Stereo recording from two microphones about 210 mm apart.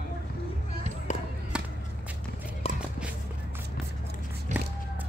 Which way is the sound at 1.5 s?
5° right (ahead or behind).